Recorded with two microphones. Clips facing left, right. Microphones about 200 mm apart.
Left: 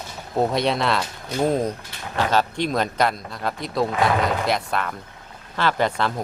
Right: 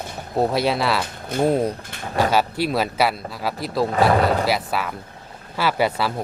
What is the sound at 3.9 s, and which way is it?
Speech, 35° right (ahead or behind).